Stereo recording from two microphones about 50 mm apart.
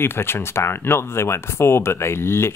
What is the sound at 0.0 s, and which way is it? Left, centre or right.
Speech, left.